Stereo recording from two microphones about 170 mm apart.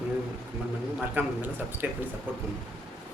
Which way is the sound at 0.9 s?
10° right (ahead or behind).